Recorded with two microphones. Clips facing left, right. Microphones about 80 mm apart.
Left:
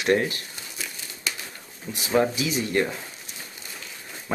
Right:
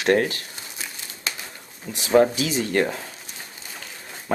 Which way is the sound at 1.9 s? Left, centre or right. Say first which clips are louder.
Right 1 dB; right.